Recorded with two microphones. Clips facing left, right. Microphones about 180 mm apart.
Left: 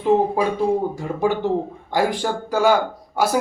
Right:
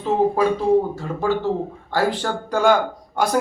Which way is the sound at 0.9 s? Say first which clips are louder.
Left 1 dB; 15° left (ahead or behind).